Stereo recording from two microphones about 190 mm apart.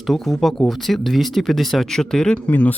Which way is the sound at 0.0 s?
Centre (ahead or behind).